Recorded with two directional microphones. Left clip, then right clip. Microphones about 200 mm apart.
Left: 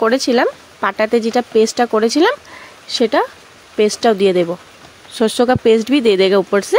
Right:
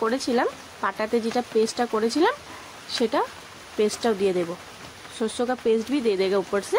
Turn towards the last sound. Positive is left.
turn(degrees=35)  # may be behind; listen again after turning